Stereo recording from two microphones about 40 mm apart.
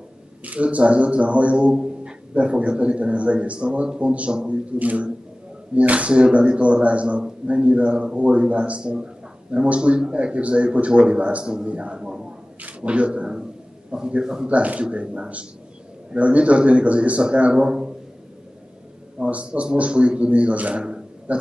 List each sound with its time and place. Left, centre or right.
0.4 s a man's voice: right
12.5 s a man's voice: right
14.2 s speech: centre
14.5 s a man's voice: right
19.1 s a man's voice: right